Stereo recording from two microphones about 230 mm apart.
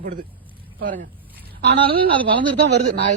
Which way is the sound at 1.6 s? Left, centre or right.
Right.